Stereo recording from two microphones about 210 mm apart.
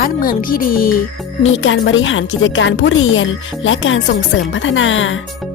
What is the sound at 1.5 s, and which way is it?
A woman's voice, 65° left (ahead or behind).